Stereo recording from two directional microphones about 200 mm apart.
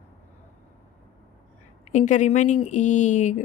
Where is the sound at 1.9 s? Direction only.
35° left (ahead or behind).